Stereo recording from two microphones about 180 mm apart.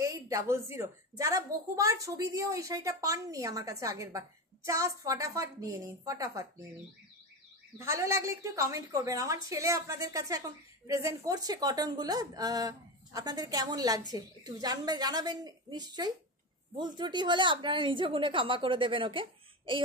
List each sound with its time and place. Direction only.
0.0 s a woman's voice: 15° right (ahead or behind)
7.7 s a woman's voice: 15° right (ahead or behind)